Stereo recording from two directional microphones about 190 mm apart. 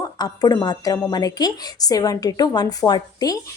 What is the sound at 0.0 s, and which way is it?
A woman's voice, 20° left (ahead or behind).